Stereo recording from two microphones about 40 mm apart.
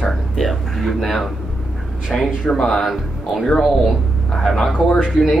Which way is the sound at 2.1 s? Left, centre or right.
Centre.